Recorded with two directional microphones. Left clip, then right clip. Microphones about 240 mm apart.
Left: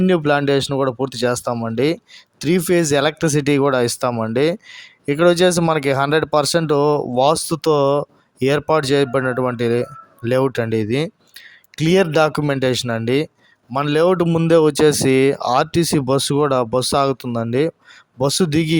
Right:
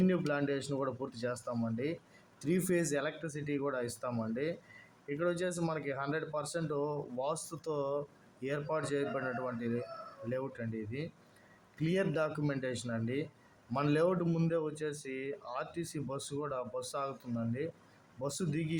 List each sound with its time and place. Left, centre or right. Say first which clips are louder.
0.0 s speech: left 17 dB; left